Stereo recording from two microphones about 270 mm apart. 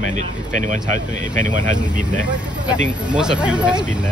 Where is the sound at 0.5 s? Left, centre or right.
Right.